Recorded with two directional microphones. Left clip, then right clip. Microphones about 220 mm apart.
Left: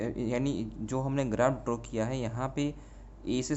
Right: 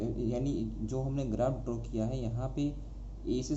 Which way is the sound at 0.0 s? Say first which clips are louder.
Left 3 dB; 35° left (ahead or behind).